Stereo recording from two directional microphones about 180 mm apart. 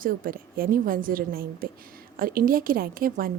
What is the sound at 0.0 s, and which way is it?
A woman's voice, 50° right (ahead or behind).